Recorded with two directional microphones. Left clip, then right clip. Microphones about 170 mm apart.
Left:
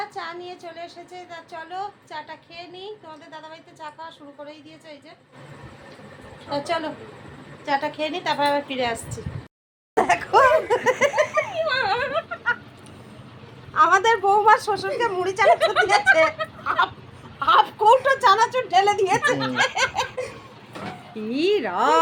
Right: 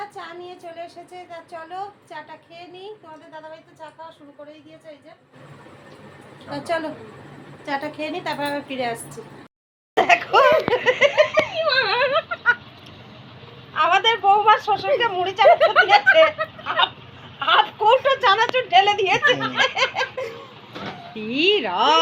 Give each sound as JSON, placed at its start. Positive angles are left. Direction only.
{"t": 0.1, "sound": "a woman's voice", "side_deg": 35}
{"t": 3.3, "sound": "a woman's voice", "side_deg": 45}
{"t": 6.5, "sound": "a woman's voice", "side_deg": 15}
{"t": 10.1, "sound": "giggle", "side_deg": 10}
{"t": 11.8, "sound": "a sound", "side_deg": -35}
{"t": 13.7, "sound": "a woman's voice", "side_deg": 10}
{"t": 19.5, "sound": "laughter", "side_deg": -25}
{"t": 21.2, "sound": "a woman's voice", "side_deg": 10}